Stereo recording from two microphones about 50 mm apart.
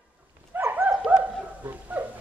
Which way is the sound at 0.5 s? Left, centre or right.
Right.